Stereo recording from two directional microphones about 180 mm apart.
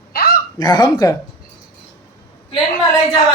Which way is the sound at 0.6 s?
25° left (ahead or behind).